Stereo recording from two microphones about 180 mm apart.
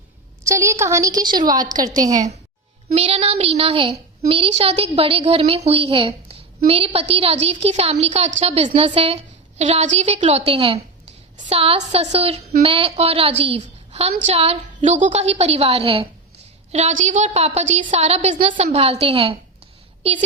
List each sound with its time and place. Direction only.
0.4 s a woman's voice: 15° right (ahead or behind)
2.9 s a woman's voice: 35° right (ahead or behind)